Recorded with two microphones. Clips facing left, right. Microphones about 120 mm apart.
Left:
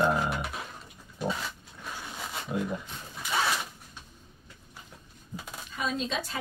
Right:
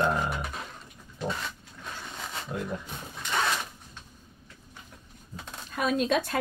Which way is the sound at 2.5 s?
5° left (ahead or behind).